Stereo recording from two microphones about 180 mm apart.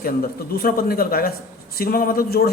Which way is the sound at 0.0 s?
55° left (ahead or behind).